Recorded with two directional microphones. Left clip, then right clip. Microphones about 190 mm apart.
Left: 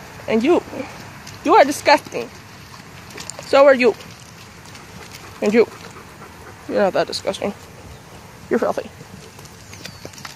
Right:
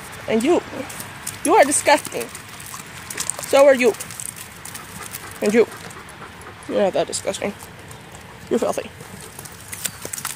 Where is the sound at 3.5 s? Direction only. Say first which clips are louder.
Left 1 dB; centre (ahead or behind).